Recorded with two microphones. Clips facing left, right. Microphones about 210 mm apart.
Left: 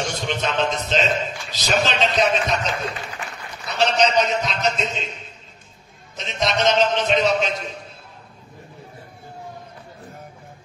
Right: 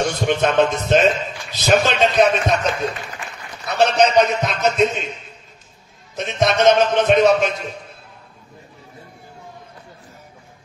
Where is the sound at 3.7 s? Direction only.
55° right (ahead or behind).